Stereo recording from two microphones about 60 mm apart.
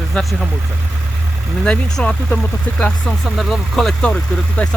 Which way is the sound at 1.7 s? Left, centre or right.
Centre.